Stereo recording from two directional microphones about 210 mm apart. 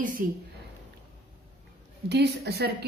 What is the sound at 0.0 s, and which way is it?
Speech, 40° right (ahead or behind).